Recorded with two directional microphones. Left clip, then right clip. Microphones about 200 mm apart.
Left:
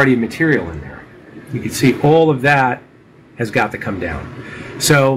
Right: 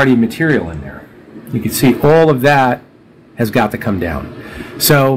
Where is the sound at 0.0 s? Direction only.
45° right (ahead or behind).